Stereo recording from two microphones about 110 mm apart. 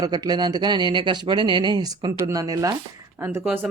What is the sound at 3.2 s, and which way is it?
Speech, 20° right (ahead or behind).